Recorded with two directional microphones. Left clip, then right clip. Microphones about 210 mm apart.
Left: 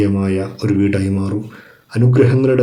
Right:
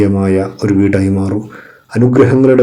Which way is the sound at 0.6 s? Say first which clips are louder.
Right 3 dB; 5° right (ahead or behind).